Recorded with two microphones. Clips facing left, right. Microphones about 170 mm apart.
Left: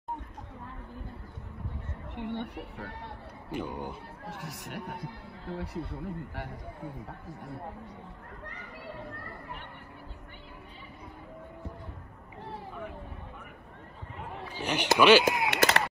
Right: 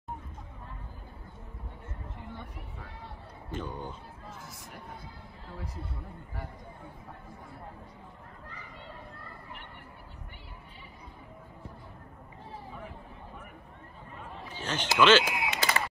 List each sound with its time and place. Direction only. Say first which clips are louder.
2.1 s speech: left 13 dB; 70° left (ahead or behind)
3.5 s speech: left 3 dB; 10° left (ahead or behind)
4.3 s speech: left 7 dB; 70° left (ahead or behind)
14.5 s a man's voice: left 5 dB; 15° left (ahead or behind)
15.5 s a sound: left 4 dB; 70° left (ahead or behind)